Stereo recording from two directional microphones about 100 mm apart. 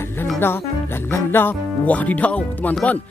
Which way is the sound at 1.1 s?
20° left (ahead or behind).